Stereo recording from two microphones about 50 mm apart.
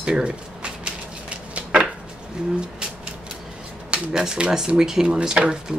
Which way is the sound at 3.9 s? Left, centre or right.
Centre.